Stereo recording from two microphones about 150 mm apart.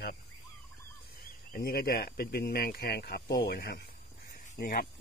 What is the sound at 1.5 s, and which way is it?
Speech, 85° left.